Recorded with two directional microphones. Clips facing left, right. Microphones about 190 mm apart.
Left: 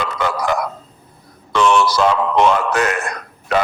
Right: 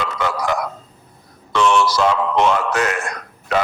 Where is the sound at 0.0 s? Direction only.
55° left (ahead or behind).